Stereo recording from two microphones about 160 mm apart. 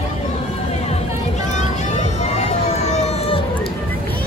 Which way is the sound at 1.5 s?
45° left (ahead or behind).